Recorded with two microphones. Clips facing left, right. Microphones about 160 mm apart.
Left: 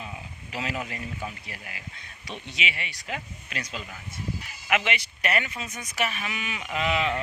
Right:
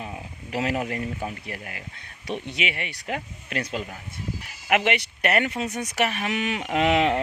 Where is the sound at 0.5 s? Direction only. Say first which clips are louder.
Right 7 dB; 55° right (ahead or behind).